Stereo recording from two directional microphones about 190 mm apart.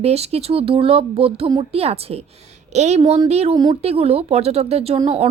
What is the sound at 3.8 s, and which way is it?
A woman's voice, 30° right (ahead or behind).